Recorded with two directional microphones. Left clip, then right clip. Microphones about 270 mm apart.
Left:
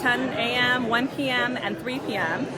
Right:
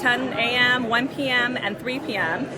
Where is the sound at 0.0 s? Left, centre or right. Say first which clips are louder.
Right 2 dB; centre.